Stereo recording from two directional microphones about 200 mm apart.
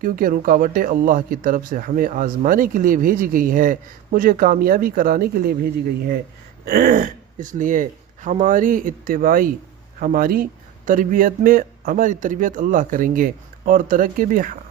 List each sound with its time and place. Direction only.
0.0 s speech: 45° right (ahead or behind)
6.7 s speech: 50° right (ahead or behind)